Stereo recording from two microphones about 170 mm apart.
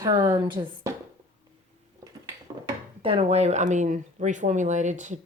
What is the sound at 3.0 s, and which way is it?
Speech, 35° right (ahead or behind).